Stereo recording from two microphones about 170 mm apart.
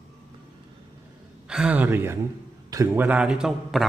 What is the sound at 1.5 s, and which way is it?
A man's voice, 5° right (ahead or behind).